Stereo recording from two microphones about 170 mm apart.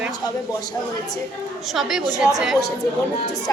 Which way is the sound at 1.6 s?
Centre (ahead or behind).